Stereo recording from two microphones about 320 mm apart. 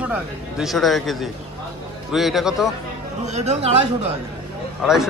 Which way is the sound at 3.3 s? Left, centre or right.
Right.